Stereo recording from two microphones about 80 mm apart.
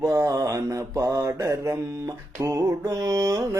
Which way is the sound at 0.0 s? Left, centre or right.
Right.